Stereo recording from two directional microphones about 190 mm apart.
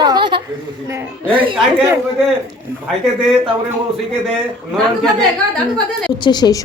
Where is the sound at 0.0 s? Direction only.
25° right (ahead or behind).